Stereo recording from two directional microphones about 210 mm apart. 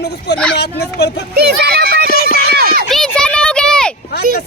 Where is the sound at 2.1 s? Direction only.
45° left (ahead or behind).